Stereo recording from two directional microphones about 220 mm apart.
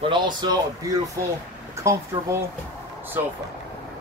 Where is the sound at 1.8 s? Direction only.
15° right (ahead or behind).